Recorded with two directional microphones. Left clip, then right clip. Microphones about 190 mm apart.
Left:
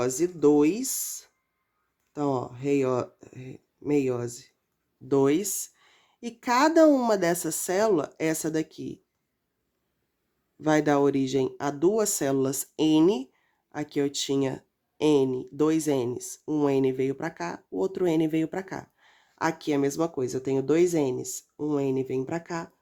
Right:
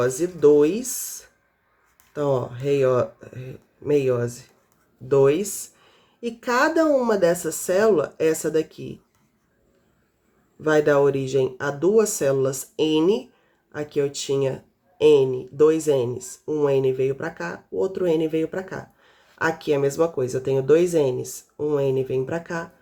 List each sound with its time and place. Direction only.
0.0 s speech: 40° left (ahead or behind)
2.1 s speech: 35° left (ahead or behind)
10.6 s speech: 45° left (ahead or behind)